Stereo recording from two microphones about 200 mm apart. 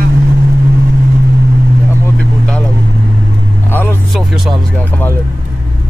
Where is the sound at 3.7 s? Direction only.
10° left (ahead or behind).